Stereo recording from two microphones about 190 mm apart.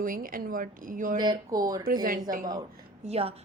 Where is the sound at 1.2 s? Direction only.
20° right (ahead or behind).